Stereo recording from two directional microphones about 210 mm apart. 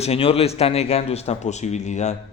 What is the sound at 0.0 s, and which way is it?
A man's voice, 30° left (ahead or behind).